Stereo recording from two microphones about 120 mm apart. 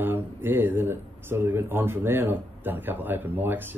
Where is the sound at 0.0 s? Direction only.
15° right (ahead or behind).